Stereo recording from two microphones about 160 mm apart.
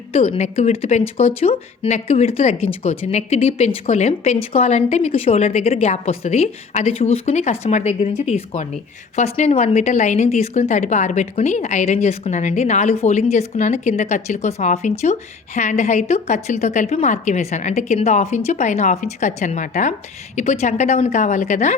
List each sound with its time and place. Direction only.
0.1 s a woman's voice: 40° left (ahead or behind)